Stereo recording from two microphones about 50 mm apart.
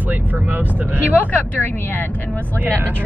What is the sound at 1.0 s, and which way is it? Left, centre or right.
Speech, left.